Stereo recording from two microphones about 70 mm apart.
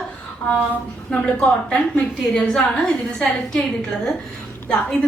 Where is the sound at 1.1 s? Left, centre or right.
Centre.